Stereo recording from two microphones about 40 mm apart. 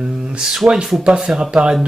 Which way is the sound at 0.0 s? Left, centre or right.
Right.